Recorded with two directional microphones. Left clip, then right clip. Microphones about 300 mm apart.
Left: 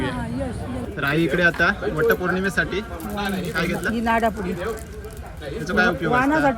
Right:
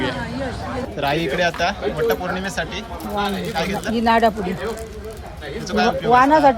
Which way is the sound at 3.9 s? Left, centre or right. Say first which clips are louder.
Right 6 dB; right.